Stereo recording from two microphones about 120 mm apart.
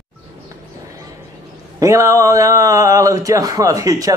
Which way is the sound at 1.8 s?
25° right (ahead or behind).